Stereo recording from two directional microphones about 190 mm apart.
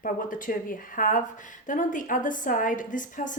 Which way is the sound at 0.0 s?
45° left (ahead or behind).